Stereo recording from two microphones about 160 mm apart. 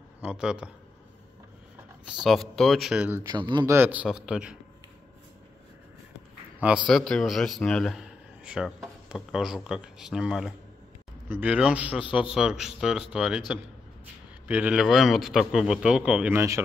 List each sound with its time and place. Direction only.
0.2 s speech: 5° right (ahead or behind)
2.2 s speech: centre (ahead or behind)
3.3 s speech: 30° right (ahead or behind)
3.7 s speech: 10° right (ahead or behind)
6.9 s speech: 5° left (ahead or behind)
14.5 s speech: 10° right (ahead or behind)